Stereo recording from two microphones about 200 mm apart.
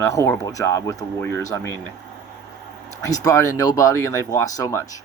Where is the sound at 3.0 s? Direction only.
15° left (ahead or behind).